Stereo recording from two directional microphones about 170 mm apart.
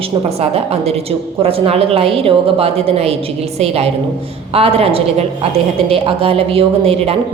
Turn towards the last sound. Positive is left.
turn(degrees=-35)  # may be behind; listen again after turning